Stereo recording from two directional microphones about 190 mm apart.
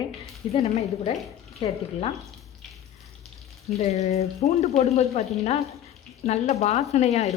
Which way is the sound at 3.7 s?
35° left (ahead or behind).